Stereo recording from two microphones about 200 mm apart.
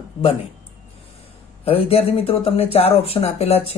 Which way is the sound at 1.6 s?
30° left (ahead or behind).